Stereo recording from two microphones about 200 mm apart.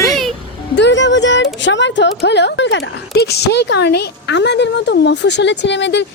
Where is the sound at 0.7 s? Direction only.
60° left (ahead or behind).